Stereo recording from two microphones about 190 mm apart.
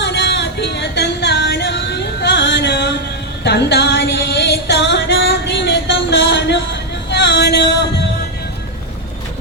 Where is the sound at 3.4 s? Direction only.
60° left (ahead or behind).